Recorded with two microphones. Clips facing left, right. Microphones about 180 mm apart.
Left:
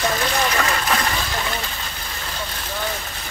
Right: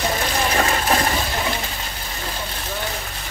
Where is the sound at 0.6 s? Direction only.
30° right (ahead or behind).